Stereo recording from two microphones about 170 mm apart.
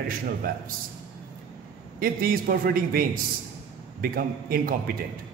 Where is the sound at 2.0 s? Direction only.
60° right (ahead or behind).